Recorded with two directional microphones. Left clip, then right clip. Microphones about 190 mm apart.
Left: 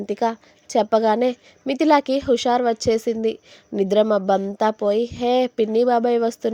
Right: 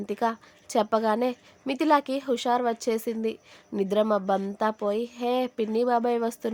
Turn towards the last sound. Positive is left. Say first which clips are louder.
# left 7 dB
turn(degrees=20)  # may be behind; listen again after turning